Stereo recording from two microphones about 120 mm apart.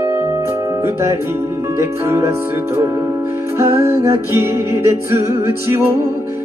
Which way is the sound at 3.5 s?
20° right (ahead or behind).